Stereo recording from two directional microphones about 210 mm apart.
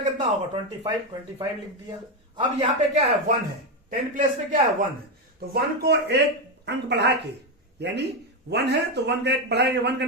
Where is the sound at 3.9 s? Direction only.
40° right (ahead or behind).